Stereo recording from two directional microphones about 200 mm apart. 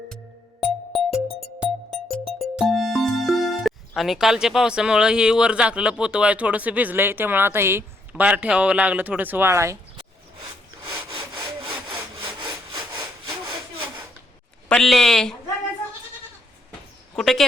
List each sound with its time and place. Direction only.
0.6 s music: 5° right (ahead or behind)
2.1 s speech: centre (ahead or behind)
10.8 s sniff: 20° right (ahead or behind)
11.6 s sawing: 25° right (ahead or behind)
14.7 s speech: centre (ahead or behind)
17.2 s speech: centre (ahead or behind)